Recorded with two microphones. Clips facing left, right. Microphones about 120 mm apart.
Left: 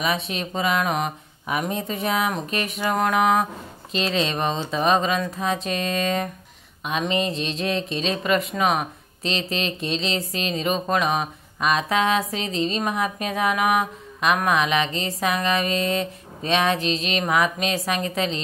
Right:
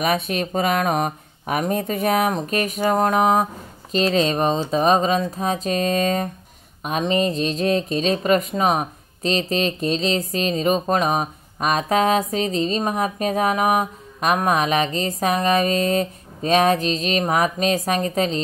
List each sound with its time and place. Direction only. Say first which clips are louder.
0.0 s speech: right 4 dB; 50° right (ahead or behind)